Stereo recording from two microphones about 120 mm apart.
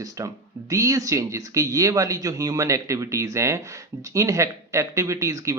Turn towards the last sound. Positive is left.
turn(degrees=-25)  # may be behind; listen again after turning